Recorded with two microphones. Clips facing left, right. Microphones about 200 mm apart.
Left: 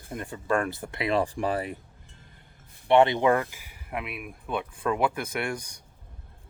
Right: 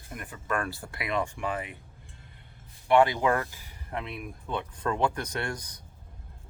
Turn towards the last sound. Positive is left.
turn(degrees=10)  # may be behind; listen again after turning